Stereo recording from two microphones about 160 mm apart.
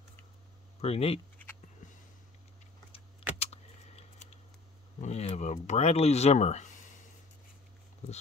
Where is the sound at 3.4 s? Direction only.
40° left (ahead or behind).